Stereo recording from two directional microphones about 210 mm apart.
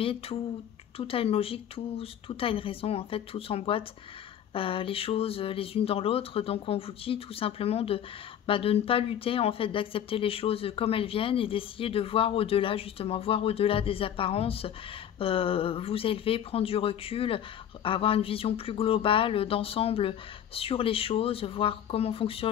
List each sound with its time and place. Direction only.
0.0 s speech: 25° left (ahead or behind)